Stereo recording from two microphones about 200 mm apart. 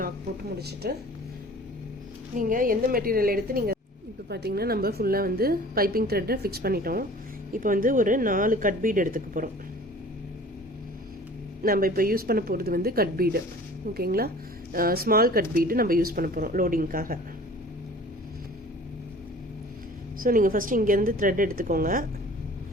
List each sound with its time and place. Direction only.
0.5 s a woman's voice: 55° right (ahead or behind)
2.3 s a woman's voice: 40° right (ahead or behind)
11.6 s a woman's voice: 45° right (ahead or behind)
20.2 s a woman's voice: 45° right (ahead or behind)